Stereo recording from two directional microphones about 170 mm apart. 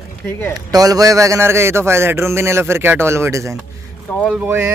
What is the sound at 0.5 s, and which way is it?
A man's voice, 20° right (ahead or behind).